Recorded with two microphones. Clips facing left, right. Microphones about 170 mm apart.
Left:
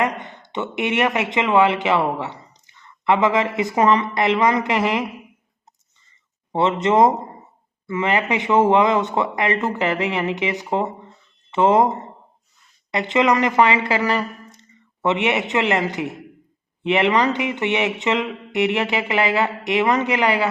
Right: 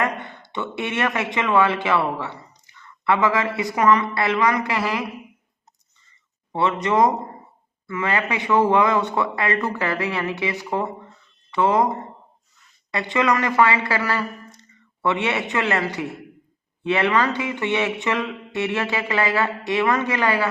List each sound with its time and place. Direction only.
0.0 s speech: 20° left (ahead or behind)
6.5 s speech: 25° left (ahead or behind)